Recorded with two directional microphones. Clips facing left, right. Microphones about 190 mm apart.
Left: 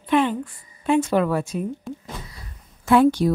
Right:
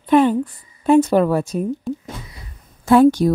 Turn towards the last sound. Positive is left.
turn(degrees=-45)  # may be behind; listen again after turning